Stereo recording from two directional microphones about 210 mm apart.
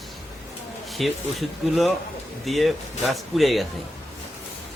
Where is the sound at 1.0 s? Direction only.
Centre (ahead or behind).